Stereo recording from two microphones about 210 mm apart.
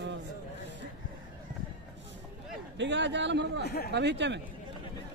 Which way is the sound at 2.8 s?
55° right (ahead or behind).